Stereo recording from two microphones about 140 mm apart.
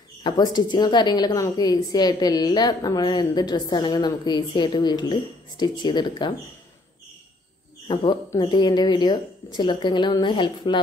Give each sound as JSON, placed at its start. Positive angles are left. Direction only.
{"t": 0.2, "sound": "a woman's voice", "side_deg": 30}
{"t": 7.9, "sound": "a woman's voice", "side_deg": 35}